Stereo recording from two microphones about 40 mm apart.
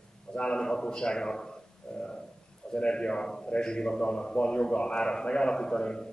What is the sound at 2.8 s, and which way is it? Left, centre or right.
A man's voice, left.